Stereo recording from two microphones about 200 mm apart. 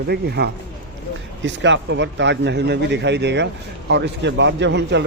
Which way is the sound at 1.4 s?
65° right (ahead or behind).